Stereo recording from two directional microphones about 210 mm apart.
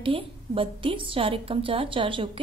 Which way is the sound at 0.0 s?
25° right (ahead or behind).